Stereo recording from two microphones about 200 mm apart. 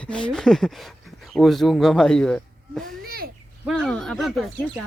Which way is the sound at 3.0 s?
50° right (ahead or behind).